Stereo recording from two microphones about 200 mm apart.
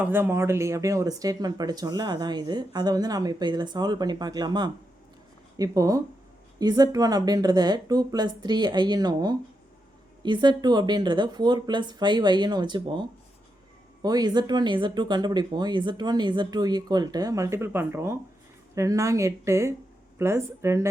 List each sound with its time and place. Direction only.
0.0 s speech: 10° right (ahead or behind)